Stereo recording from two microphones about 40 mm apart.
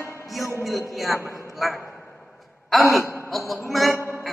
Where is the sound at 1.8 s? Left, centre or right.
Left.